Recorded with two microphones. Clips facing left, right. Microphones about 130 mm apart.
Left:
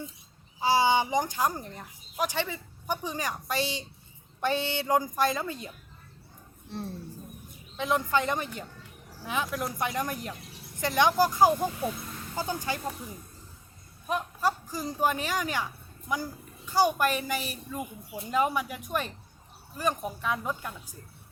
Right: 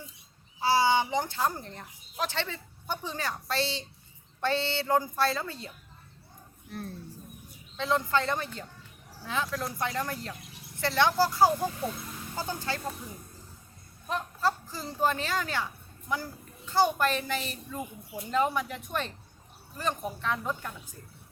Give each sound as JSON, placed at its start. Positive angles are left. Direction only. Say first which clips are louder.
{"t": 0.6, "sound": "a woman's voice", "louder": "left 1 dB", "side_deg": 15}
{"t": 6.7, "sound": "speech", "louder": "left 2 dB", "side_deg": 30}
{"t": 7.8, "sound": "a woman's voice", "louder": "left 1 dB", "side_deg": 15}
{"t": 14.1, "sound": "a woman's voice", "louder": "left 1 dB", "side_deg": 15}